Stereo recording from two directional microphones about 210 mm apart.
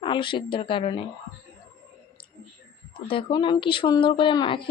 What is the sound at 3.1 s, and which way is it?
Speech, 25° left (ahead or behind).